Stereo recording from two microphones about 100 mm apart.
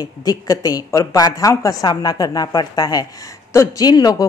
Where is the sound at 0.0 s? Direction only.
40° left (ahead or behind).